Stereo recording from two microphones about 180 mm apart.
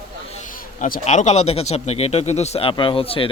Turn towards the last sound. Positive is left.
turn(degrees=30)  # may be behind; listen again after turning